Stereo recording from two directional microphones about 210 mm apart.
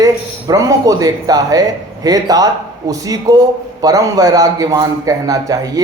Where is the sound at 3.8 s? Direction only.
15° right (ahead or behind).